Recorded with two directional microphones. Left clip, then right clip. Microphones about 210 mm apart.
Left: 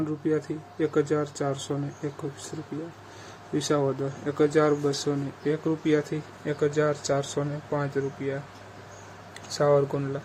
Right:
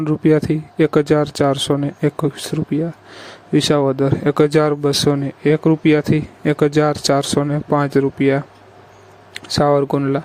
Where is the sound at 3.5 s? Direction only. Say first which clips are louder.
Right 11 dB; 40° right (ahead or behind).